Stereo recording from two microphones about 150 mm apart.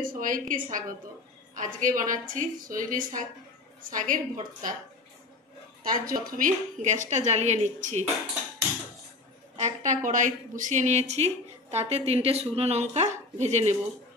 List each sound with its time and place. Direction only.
0.0 s a woman's voice: 65° right (ahead or behind)
5.9 s a woman's voice: 65° right (ahead or behind)
9.6 s a woman's voice: 55° right (ahead or behind)